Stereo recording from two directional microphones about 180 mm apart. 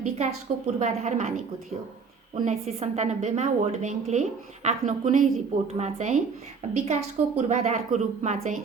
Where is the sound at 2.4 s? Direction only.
35° right (ahead or behind).